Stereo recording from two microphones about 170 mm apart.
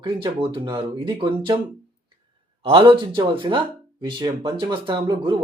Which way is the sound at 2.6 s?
30° right (ahead or behind).